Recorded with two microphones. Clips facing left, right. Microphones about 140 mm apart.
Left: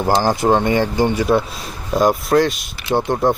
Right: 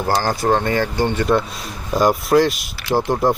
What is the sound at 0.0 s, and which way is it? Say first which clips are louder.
Speech: left 3 dB; 15° left (ahead or behind).